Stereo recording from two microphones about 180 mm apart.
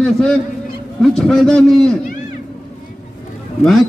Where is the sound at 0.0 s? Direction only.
5° left (ahead or behind).